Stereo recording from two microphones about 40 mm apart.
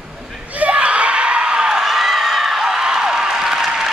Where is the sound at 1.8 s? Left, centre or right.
Centre.